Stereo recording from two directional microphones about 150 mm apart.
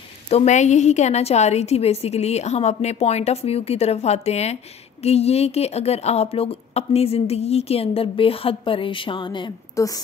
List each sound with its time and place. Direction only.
0.3 s a woman's voice: 50° left (ahead or behind); by 10.0 s 25° left (ahead or behind)